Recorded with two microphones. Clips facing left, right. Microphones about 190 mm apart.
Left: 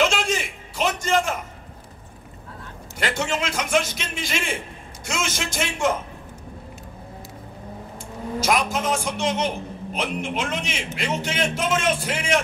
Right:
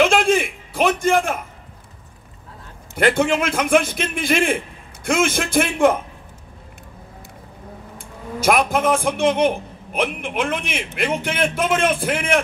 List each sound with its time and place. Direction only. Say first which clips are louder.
0.0 s a sound: right 6 dB; 55° right (ahead or behind)
3.0 s a man's voice: right 8 dB; 55° right (ahead or behind)
8.4 s a man's voice: right 5 dB; 55° right (ahead or behind)